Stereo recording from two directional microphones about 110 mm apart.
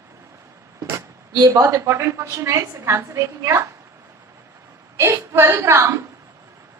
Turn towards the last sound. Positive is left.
turn(degrees=-25)  # may be behind; listen again after turning